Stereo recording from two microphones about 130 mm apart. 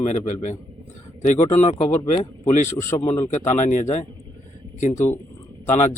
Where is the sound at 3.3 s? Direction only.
65° left (ahead or behind).